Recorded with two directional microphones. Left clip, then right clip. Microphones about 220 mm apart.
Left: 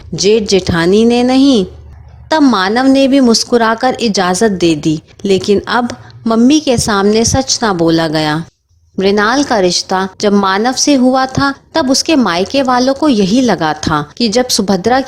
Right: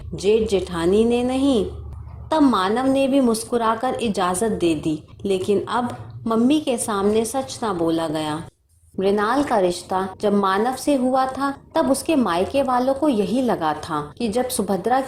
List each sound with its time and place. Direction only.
0.2 s speech: 45° left (ahead or behind)